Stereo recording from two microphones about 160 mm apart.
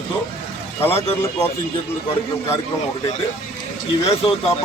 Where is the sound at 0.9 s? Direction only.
40° left (ahead or behind).